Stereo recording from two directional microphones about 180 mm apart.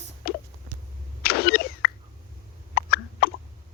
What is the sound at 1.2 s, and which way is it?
Vehicle, 60° left (ahead or behind).